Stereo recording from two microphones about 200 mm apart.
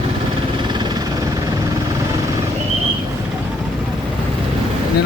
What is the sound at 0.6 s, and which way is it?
Vehicle, 20° right (ahead or behind).